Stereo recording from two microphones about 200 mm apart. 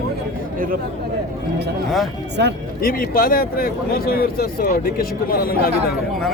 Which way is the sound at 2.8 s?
45° left (ahead or behind).